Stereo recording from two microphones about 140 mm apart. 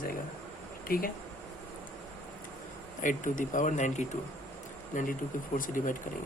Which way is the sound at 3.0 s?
65° left (ahead or behind).